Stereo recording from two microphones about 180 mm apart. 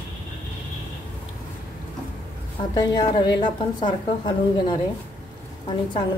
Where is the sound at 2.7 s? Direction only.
25° left (ahead or behind).